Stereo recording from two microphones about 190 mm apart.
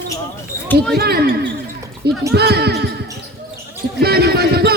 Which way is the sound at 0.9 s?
55° right (ahead or behind).